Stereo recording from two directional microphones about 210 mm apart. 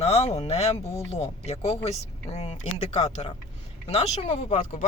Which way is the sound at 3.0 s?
35° left (ahead or behind).